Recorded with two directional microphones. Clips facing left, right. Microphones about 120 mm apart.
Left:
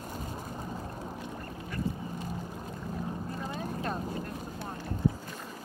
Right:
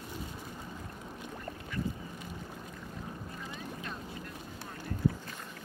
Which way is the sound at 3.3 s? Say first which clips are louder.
Left 7 dB; 40° left (ahead or behind).